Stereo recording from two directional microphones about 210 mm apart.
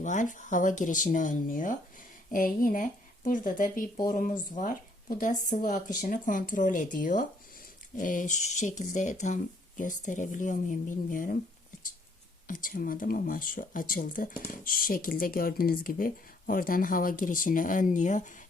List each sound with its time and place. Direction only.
0.0 s speech: 35° left (ahead or behind)
12.5 s speech: 40° left (ahead or behind)